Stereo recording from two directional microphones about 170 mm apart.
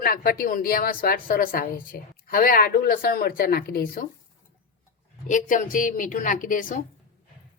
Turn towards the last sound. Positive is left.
turn(degrees=50)  # may be behind; listen again after turning